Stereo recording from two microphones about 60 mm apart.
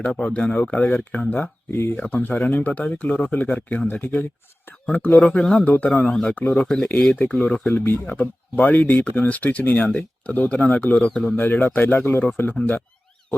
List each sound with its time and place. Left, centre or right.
0.0 s speech: centre
1.4 s speech: left
2.0 s speech: left
6.0 s speech: centre
6.8 s speech: centre
11.3 s speech: left
12.5 s speech: left